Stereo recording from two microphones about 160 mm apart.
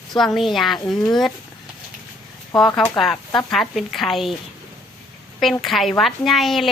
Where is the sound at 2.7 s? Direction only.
5° left (ahead or behind).